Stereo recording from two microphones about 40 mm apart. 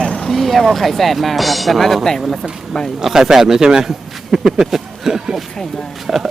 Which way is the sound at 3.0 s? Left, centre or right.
Centre.